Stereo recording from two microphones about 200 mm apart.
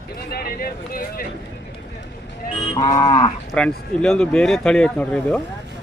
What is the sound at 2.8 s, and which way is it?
Cattle, 20° left (ahead or behind).